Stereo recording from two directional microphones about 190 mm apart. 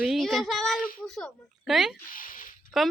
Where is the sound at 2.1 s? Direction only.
45° left (ahead or behind).